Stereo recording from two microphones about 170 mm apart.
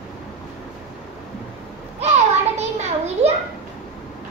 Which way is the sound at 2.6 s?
40° right (ahead or behind).